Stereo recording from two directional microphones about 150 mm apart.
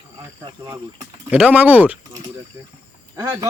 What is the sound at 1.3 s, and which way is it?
Speech, 10° right (ahead or behind).